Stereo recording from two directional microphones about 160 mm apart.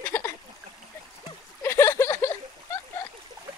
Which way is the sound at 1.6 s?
15° left (ahead or behind).